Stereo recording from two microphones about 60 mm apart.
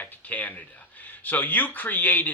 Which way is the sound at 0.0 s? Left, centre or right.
Left.